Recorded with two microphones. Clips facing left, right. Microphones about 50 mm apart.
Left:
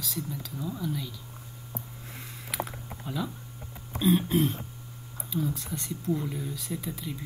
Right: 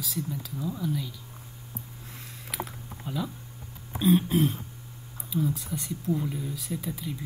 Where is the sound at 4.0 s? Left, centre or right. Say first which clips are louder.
Right 1 dB; centre.